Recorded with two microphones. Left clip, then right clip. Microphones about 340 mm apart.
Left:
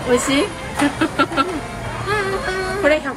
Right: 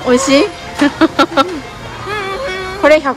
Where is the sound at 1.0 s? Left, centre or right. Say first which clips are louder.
Right 9 dB; centre.